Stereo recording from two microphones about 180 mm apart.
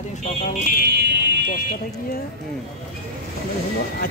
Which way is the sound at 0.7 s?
65° right (ahead or behind).